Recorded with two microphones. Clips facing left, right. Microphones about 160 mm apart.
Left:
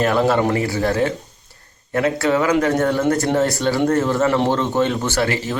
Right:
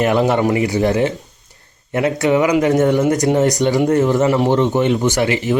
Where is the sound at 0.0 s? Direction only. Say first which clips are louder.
Right 2 dB; 20° right (ahead or behind).